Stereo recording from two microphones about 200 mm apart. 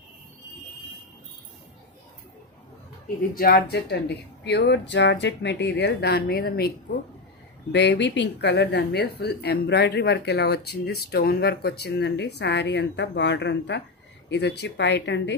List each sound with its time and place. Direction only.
3.3 s speech: 50° left (ahead or behind)
7.7 s speech: 60° left (ahead or behind)